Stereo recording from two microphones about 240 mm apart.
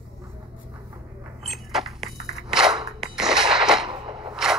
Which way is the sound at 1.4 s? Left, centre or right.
Centre.